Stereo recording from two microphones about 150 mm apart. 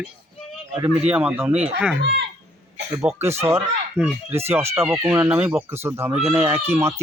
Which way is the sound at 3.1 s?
10° right (ahead or behind).